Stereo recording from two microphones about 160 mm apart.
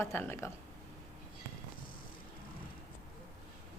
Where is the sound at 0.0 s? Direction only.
15° left (ahead or behind).